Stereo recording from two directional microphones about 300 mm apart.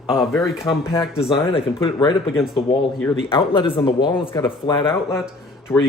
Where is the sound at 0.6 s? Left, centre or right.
Centre.